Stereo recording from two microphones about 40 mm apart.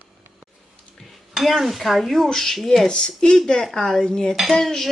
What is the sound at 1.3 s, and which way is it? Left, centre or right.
Speech, centre.